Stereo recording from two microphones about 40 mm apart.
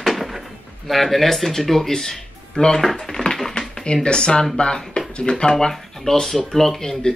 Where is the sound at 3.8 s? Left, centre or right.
Left.